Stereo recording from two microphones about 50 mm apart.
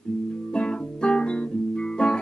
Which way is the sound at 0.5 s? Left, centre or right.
Centre.